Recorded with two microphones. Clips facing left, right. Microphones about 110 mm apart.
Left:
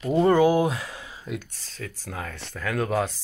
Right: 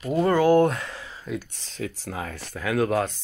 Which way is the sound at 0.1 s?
25° left (ahead or behind).